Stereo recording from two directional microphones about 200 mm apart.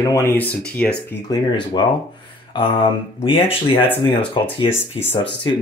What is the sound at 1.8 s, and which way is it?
Speech, 20° left (ahead or behind).